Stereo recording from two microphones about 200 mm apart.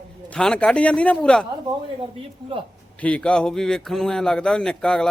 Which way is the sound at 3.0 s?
5° left (ahead or behind).